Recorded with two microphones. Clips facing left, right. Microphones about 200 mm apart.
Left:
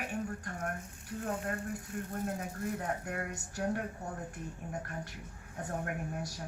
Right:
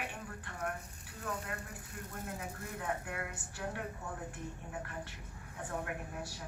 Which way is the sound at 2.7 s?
45° left (ahead or behind).